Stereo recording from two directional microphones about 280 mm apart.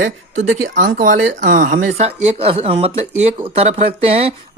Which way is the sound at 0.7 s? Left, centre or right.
Right.